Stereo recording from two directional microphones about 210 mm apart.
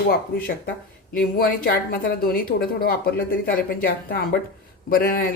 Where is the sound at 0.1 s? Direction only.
45° left (ahead or behind).